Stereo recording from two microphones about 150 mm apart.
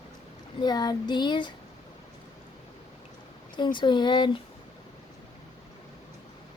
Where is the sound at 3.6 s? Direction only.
30° left (ahead or behind).